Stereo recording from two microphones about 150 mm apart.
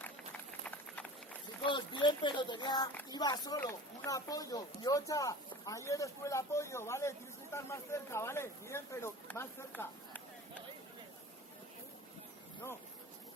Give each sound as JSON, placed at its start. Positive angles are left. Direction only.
{"t": 0.6, "sound": "run", "side_deg": 10}
{"t": 1.6, "sound": "speech", "side_deg": 30}